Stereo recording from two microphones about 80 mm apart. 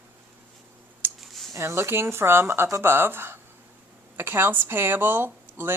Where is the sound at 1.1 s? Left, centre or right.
Centre.